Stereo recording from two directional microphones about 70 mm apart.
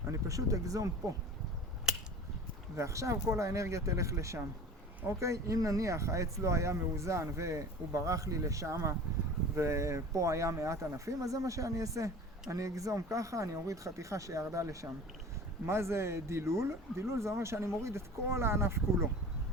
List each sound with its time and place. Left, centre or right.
0.1 s speech: right
2.7 s speech: right